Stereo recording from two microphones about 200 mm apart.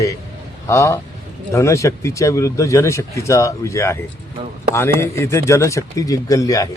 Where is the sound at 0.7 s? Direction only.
15° left (ahead or behind).